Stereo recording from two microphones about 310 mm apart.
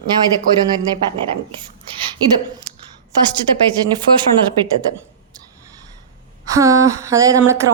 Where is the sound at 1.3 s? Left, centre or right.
Centre.